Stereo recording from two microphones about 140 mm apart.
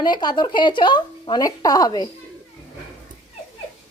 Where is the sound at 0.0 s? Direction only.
30° left (ahead or behind).